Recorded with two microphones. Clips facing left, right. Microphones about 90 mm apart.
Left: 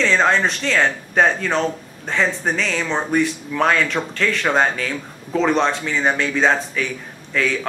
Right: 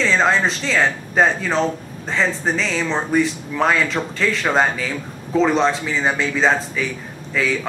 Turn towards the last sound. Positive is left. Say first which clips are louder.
# even
turn(degrees=0)  # may be behind; listen again after turning